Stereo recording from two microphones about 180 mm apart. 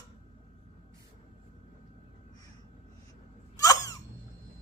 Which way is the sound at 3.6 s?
20° left (ahead or behind).